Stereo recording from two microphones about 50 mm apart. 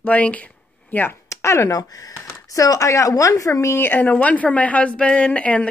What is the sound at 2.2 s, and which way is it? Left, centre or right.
Speech, left.